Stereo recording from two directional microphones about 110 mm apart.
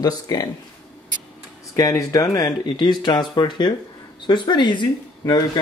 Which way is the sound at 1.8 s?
30° left (ahead or behind).